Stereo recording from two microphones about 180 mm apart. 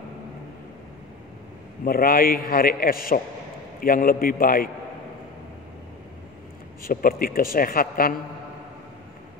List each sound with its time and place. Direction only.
1.9 s a man's voice: 55° left (ahead or behind)
6.8 s a woman's voice: 55° left (ahead or behind)